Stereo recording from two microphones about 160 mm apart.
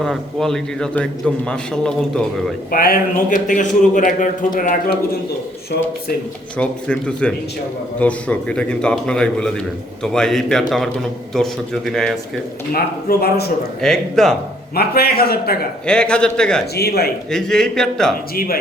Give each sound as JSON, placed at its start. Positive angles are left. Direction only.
{"t": 0.0, "sound": "a man's voice", "side_deg": 0}
{"t": 2.7, "sound": "speech", "side_deg": 65}
{"t": 6.6, "sound": "a man's voice", "side_deg": 5}
{"t": 12.7, "sound": "speech", "side_deg": 75}
{"t": 13.8, "sound": "a man's voice", "side_deg": 5}
{"t": 14.8, "sound": "speech", "side_deg": 75}
{"t": 15.9, "sound": "a man's voice", "side_deg": 5}
{"t": 16.7, "sound": "a man's voice", "side_deg": 80}
{"t": 17.3, "sound": "a man's voice", "side_deg": 5}